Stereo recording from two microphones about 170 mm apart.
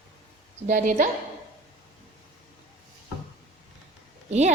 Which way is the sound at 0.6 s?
50° right (ahead or behind).